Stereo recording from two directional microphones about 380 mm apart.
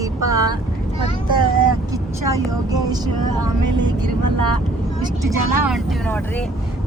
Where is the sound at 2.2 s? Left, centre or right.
Centre.